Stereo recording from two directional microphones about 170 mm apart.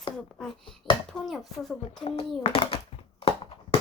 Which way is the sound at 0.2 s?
5° left (ahead or behind).